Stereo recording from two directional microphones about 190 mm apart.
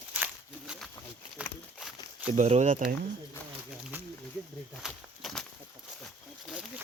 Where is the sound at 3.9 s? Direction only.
10° right (ahead or behind).